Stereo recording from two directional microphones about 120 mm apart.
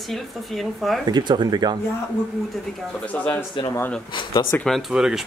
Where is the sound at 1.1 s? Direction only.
40° right (ahead or behind).